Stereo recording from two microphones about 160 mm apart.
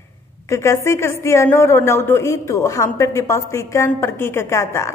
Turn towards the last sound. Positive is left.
turn(degrees=15)  # may be behind; listen again after turning